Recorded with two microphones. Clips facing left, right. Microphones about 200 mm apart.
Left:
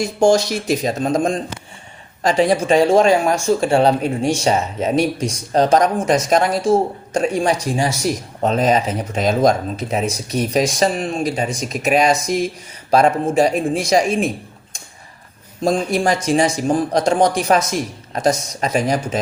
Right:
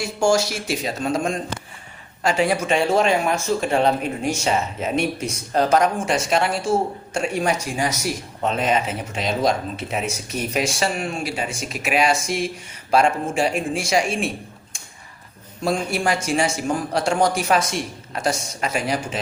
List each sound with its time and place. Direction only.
0.3 s speech: 35° left (ahead or behind)
15.6 s speech: 35° left (ahead or behind)